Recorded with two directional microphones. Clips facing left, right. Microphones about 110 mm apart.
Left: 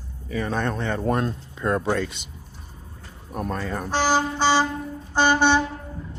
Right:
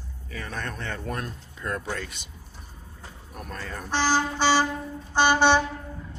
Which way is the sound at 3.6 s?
30° left (ahead or behind).